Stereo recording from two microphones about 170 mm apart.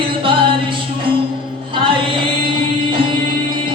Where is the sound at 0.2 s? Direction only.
30° right (ahead or behind).